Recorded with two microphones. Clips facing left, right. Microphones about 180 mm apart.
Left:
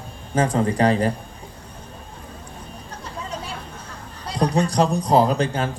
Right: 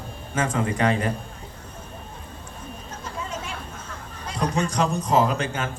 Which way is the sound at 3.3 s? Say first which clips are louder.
Left 1 dB; 35° left (ahead or behind).